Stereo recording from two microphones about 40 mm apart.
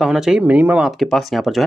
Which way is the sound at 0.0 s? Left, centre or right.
Centre.